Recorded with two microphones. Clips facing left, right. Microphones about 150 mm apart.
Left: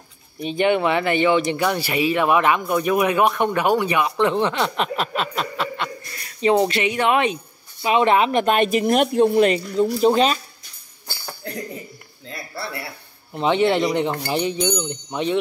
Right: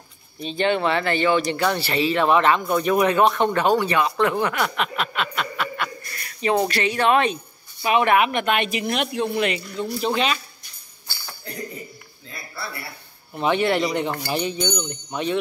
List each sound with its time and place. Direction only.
0.4 s speech: 15° left (ahead or behind); by 10.4 s 40° left (ahead or behind)
13.3 s speech: 20° left (ahead or behind)